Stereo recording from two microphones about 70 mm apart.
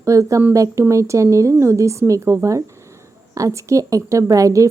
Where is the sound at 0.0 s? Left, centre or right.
Right.